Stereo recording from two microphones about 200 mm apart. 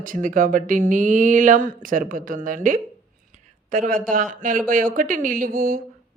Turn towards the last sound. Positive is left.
turn(degrees=-45)  # may be behind; listen again after turning